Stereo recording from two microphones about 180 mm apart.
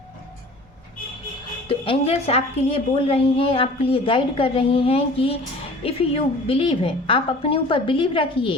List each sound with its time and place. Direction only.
1.6 s a woman's voice: 30° left (ahead or behind)